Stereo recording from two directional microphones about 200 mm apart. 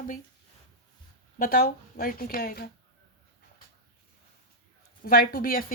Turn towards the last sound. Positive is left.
turn(degrees=45)  # may be behind; listen again after turning